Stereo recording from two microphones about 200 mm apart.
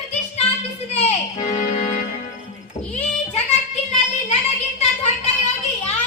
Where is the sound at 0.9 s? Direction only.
30° left (ahead or behind).